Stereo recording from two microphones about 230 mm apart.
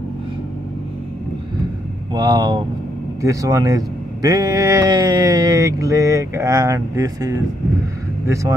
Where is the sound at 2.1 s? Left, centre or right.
Centre.